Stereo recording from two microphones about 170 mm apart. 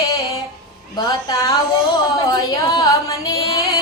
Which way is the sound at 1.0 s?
20° left (ahead or behind).